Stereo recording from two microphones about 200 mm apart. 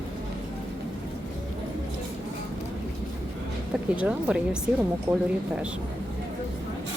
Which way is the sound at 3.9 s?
5° right (ahead or behind).